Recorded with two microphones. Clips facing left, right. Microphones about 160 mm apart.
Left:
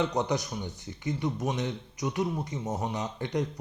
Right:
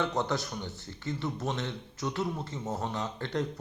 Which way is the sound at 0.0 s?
15° left (ahead or behind).